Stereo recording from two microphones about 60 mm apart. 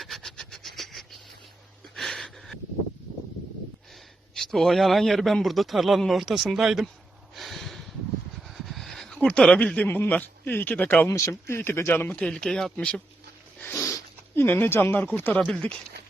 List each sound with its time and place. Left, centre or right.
0.2 s a sound: centre
4.4 s a man's voice: centre
7.3 s snort: centre
8.4 s a sound: centre
9.1 s a man's voice: centre
11.1 s speech: left
12.1 s speech: centre
13.7 s a sound: left
14.3 s speech: left
15.5 s speech: centre